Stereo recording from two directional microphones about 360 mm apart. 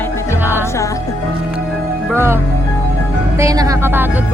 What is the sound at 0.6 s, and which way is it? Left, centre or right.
Music, centre.